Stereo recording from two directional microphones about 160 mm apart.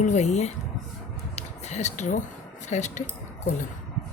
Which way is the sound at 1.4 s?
45° left (ahead or behind).